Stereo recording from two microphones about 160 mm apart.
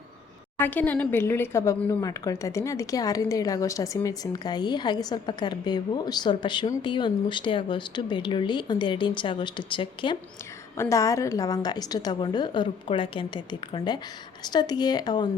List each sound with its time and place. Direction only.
0.6 s speech: 10° left (ahead or behind); by 10.2 s 30° left (ahead or behind)
10.8 s speech: 20° left (ahead or behind)